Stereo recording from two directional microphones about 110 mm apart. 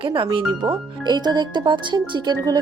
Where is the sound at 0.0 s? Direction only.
50° right (ahead or behind).